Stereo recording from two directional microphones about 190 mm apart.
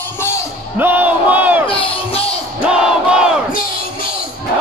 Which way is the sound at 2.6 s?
5° right (ahead or behind).